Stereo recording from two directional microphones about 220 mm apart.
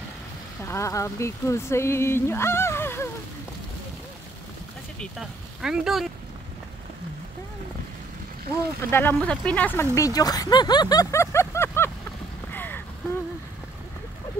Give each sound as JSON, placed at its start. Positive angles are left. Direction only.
{"t": 0.6, "sound": "speech", "side_deg": 10}
{"t": 5.6, "sound": "speech", "side_deg": 0}
{"t": 8.9, "sound": "speech", "side_deg": 5}
{"t": 12.5, "sound": "a sound", "side_deg": 10}